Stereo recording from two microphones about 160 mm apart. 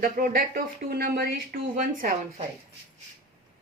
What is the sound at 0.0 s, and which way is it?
Speech, 60° right (ahead or behind).